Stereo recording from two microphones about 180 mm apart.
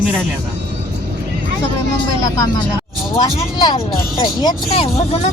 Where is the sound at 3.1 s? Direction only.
25° left (ahead or behind).